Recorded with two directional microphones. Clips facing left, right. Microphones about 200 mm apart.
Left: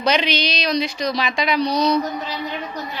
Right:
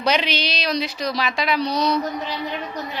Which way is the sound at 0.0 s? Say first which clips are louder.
Left 2 dB; 5° right (ahead or behind).